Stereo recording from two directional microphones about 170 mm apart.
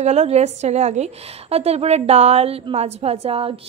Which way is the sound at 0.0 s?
40° right (ahead or behind).